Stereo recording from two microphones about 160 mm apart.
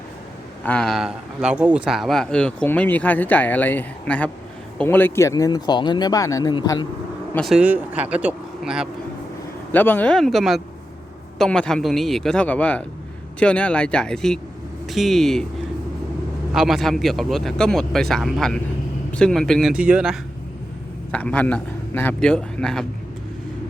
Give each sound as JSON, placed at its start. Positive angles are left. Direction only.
{"t": 0.6, "sound": "speech", "side_deg": 5}
{"t": 7.3, "sound": "speech", "side_deg": 0}
{"t": 9.7, "sound": "speech", "side_deg": 10}
{"t": 16.5, "sound": "speech", "side_deg": -5}
{"t": 21.1, "sound": "speech", "side_deg": 10}